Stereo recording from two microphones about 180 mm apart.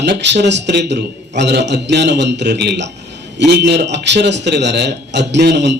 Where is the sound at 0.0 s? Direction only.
75° right (ahead or behind).